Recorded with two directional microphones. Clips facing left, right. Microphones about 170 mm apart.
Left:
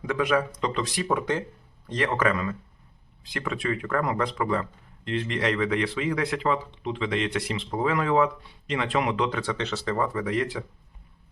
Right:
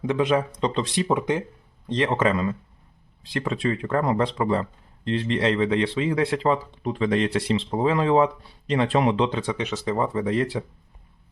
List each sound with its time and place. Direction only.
0.0 s speech: 25° right (ahead or behind)
9.4 s speech: 15° right (ahead or behind); by 10.6 s 30° right (ahead or behind)